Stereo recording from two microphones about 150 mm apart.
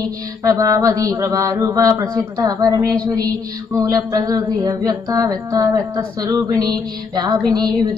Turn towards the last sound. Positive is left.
turn(degrees=-25)  # may be behind; listen again after turning